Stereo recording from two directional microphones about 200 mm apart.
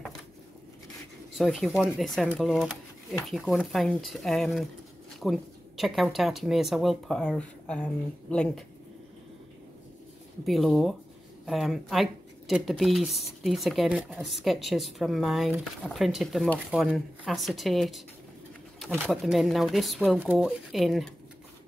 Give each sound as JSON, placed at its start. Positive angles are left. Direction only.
{"t": 1.4, "sound": "speech", "side_deg": 0}
{"t": 10.4, "sound": "speech", "side_deg": 0}